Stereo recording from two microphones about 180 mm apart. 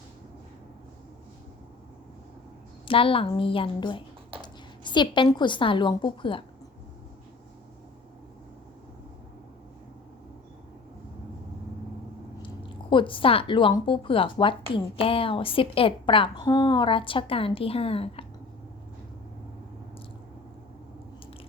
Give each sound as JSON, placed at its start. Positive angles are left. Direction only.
{"t": 2.8, "sound": "a woman's voice", "side_deg": 30}
{"t": 12.4, "sound": "speech", "side_deg": 30}